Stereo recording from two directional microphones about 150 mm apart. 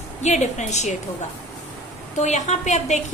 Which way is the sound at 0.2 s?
50° left (ahead or behind).